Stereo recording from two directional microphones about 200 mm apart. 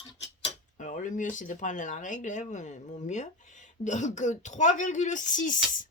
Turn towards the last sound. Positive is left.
turn(degrees=40)  # may be behind; listen again after turning